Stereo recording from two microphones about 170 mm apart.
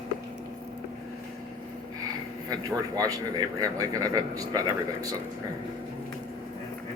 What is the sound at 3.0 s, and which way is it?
Speech, 20° right (ahead or behind).